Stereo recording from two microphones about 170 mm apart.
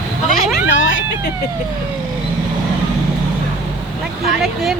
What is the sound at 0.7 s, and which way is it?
Vehicle, 90° left.